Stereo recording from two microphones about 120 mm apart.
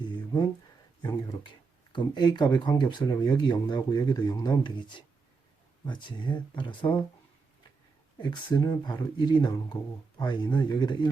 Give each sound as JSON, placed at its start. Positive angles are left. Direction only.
{"t": 0.0, "sound": "a sound", "side_deg": 40}
{"t": 1.0, "sound": "speech", "side_deg": 40}
{"t": 8.2, "sound": "speech", "side_deg": 40}